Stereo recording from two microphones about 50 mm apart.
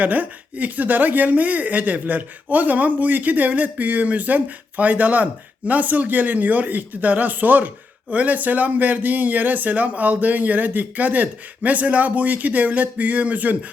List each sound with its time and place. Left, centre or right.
0.0 s speech: right